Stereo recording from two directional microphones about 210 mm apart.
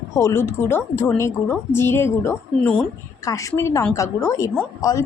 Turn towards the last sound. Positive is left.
turn(degrees=15)  # may be behind; listen again after turning